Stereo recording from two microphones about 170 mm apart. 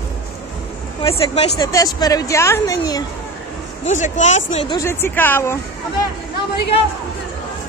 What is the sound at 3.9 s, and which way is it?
Speech, 45° left (ahead or behind).